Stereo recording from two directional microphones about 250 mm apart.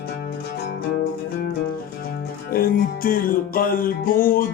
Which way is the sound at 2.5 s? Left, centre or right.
Left.